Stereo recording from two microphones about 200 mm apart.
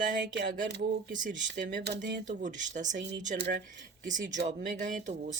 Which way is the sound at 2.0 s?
40° right (ahead or behind).